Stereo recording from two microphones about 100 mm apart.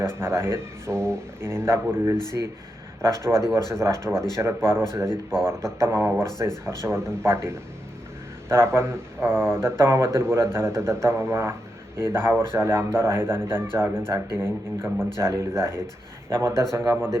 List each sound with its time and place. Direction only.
0.0 s speech: 25° right (ahead or behind)
8.4 s speech: 25° right (ahead or behind)